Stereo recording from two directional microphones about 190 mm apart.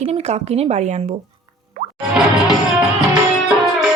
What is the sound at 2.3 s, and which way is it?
Music, centre (ahead or behind).